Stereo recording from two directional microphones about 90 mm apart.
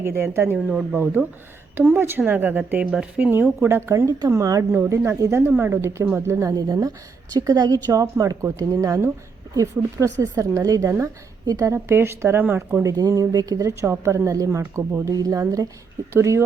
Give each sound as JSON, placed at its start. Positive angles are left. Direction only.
{"t": 0.0, "sound": "a woman's voice", "side_deg": -25}
{"t": 5.5, "sound": "a woman's voice", "side_deg": -20}
{"t": 6.5, "sound": "a woman's voice", "side_deg": -50}
{"t": 12.8, "sound": "speech", "side_deg": -40}